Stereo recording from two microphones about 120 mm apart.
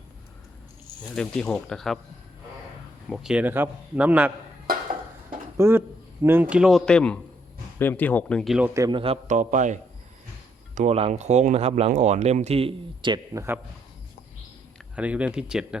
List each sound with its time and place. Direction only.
1.1 s speech: 5° left (ahead or behind)
3.1 s speech: 5° right (ahead or behind)
3.4 s a man's voice: 15° right (ahead or behind)
5.5 s speech: 20° right (ahead or behind); by 8.5 s 5° left (ahead or behind)
8.9 s a man's voice: 45° right (ahead or behind)
9.2 s a man's voice: 90° right
10.8 s speech: 65° right (ahead or behind); by 13.1 s 45° right (ahead or behind)
13.3 s speech: 20° right (ahead or behind)
14.9 s a man's voice: 10° right (ahead or behind)